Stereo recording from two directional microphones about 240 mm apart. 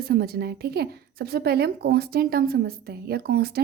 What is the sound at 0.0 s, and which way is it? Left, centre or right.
A woman's voice, right.